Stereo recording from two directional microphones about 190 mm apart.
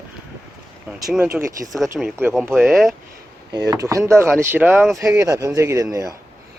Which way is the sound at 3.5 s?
20° right (ahead or behind).